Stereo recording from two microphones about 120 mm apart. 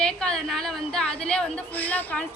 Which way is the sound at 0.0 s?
5° left (ahead or behind).